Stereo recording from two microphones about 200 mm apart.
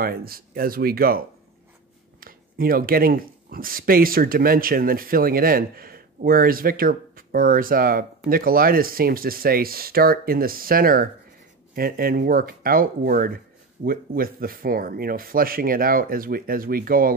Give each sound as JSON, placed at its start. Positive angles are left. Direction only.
{"t": 0.0, "sound": "speech", "side_deg": -50}